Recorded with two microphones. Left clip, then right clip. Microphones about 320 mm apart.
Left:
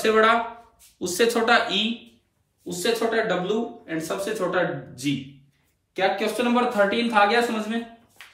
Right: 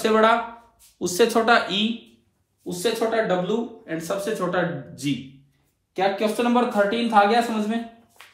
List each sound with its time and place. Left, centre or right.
0.0 s a man's voice: centre